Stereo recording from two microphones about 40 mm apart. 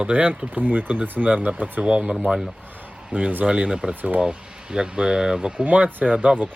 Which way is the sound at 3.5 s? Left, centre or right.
Right.